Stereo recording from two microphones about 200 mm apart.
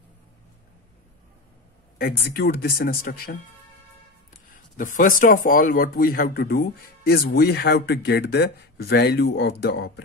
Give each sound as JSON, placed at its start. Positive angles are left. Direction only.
{"t": 2.0, "sound": "speech", "side_deg": 50}
{"t": 4.5, "sound": "speech", "side_deg": 40}